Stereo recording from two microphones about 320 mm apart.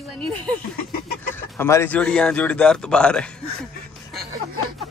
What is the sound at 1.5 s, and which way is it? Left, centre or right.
A man's voice, centre.